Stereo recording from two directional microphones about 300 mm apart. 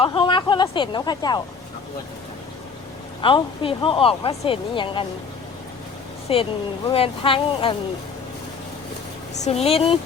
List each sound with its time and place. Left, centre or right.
0.0 s speech: centre
3.2 s speech: centre
6.2 s speech: centre
9.4 s speech: centre